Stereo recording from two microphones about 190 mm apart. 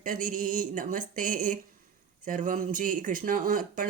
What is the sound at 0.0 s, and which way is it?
Speech, 45° right (ahead or behind).